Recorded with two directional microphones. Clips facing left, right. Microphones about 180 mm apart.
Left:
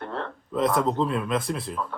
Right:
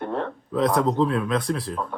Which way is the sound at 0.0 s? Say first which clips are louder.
Right 5 dB; 15° right (ahead or behind).